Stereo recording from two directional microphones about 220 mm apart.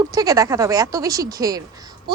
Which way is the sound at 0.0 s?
15° right (ahead or behind).